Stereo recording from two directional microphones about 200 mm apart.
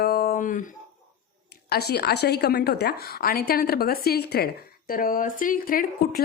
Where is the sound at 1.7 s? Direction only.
50° left (ahead or behind).